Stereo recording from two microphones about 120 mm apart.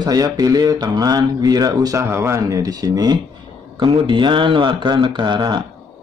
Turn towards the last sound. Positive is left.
turn(degrees=-40)  # may be behind; listen again after turning